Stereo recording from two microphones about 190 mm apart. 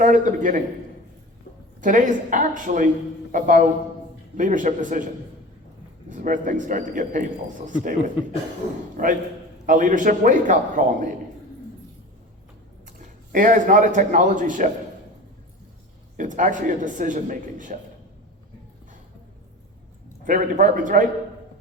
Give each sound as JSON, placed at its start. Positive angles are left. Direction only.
{"t": 0.0, "sound": "speech", "side_deg": -45}
{"t": 1.8, "sound": "speech", "side_deg": -45}
{"t": 6.1, "sound": "speech", "side_deg": -45}
{"t": 13.3, "sound": "speech", "side_deg": -45}
{"t": 16.1, "sound": "speech", "side_deg": -45}
{"t": 20.2, "sound": "speech", "side_deg": -45}